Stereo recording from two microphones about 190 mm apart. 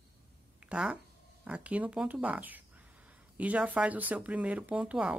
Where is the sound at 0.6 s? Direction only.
5° right (ahead or behind).